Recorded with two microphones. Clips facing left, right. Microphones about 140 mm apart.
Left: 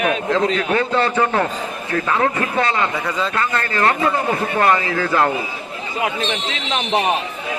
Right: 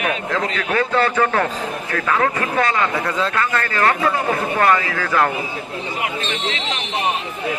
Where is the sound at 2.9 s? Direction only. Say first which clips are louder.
Right 1 dB; centre (ahead or behind).